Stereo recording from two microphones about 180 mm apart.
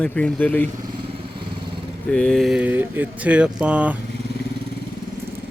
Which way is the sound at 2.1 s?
5° left (ahead or behind).